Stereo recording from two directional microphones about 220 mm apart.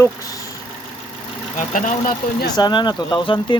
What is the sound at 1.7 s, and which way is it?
Speech, 35° left (ahead or behind).